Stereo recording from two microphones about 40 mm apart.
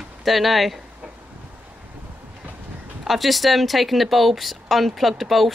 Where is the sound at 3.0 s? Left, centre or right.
Centre.